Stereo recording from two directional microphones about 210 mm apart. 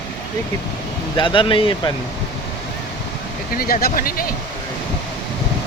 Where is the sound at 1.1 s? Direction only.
25° left (ahead or behind).